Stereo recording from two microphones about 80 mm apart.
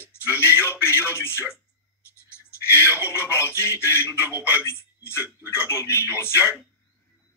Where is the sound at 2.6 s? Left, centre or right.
Left.